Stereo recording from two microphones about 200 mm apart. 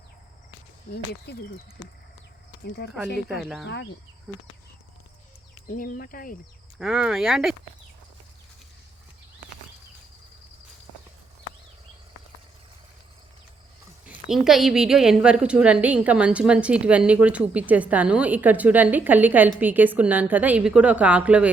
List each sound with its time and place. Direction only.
0.9 s speech: 55° left (ahead or behind)
2.6 s speech: 55° left (ahead or behind)
3.2 s speech: centre (ahead or behind)
5.6 s speech: 45° left (ahead or behind)
6.7 s speech: centre (ahead or behind)
14.0 s a woman's voice: 5° right (ahead or behind)